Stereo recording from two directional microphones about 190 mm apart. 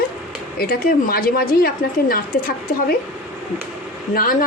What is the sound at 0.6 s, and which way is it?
A woman's voice, 50° left (ahead or behind).